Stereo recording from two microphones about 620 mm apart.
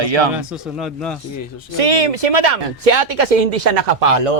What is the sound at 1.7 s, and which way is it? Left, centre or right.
Speech, right.